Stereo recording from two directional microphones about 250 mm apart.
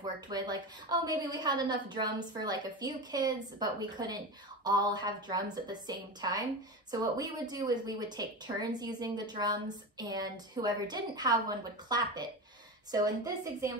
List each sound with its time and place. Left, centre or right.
0.3 s speech: centre